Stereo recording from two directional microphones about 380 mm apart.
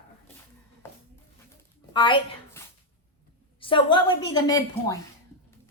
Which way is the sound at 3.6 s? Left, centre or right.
Centre.